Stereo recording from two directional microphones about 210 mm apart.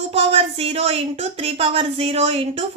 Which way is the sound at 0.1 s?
30° right (ahead or behind).